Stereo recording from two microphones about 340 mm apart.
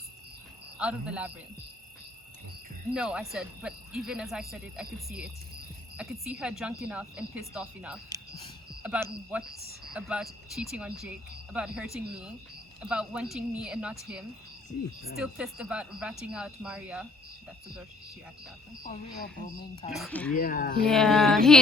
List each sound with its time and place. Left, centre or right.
0.8 s speech: centre
2.9 s speech: centre
18.8 s speech: left
19.9 s speech: centre
20.3 s speech: left
20.8 s speech: centre